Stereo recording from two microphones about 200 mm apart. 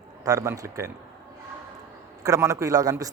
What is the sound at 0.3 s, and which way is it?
Speech, 15° right (ahead or behind).